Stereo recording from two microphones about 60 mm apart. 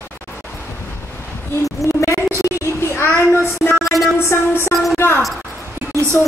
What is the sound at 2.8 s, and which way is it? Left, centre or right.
Child singing, left.